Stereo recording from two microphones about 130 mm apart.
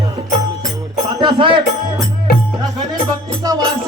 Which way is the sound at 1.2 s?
40° right (ahead or behind).